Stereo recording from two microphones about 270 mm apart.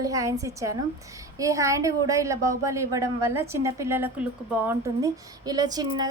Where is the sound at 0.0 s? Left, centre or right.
Centre.